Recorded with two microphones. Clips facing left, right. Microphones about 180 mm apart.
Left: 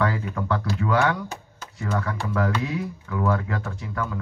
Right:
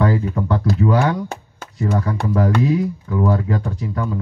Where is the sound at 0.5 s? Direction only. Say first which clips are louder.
Right 6 dB; 35° right (ahead or behind).